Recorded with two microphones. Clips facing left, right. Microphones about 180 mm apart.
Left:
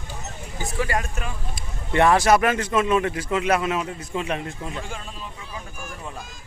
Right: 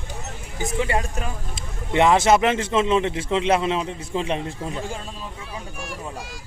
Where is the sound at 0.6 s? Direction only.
20° right (ahead or behind).